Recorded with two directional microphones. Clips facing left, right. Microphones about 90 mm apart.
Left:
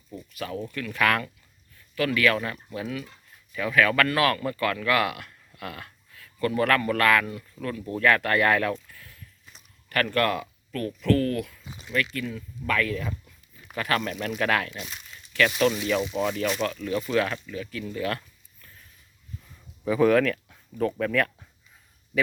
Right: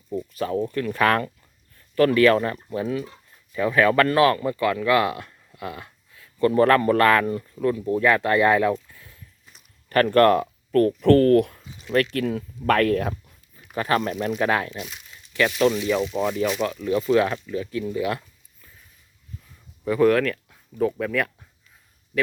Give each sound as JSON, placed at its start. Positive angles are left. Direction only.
{"t": 0.3, "sound": "speech", "side_deg": -35}
{"t": 7.5, "sound": "speech", "side_deg": -20}
{"t": 9.9, "sound": "speech", "side_deg": -35}
{"t": 13.7, "sound": "speech", "side_deg": -25}
{"t": 14.8, "sound": "crumpling", "side_deg": -10}
{"t": 15.3, "sound": "a sound", "side_deg": -20}
{"t": 16.0, "sound": "speech", "side_deg": 5}
{"t": 16.2, "sound": "speech", "side_deg": -10}
{"t": 16.6, "sound": "speech", "side_deg": -20}
{"t": 19.8, "sound": "speech", "side_deg": 0}